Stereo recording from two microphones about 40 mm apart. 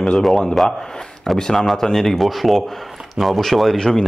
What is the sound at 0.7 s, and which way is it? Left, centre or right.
Speech, centre.